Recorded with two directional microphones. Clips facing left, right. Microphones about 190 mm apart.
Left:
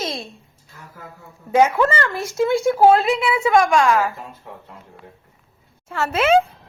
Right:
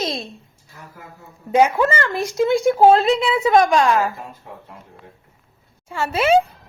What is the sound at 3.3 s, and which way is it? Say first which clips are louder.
Speech: even; 35° right (ahead or behind).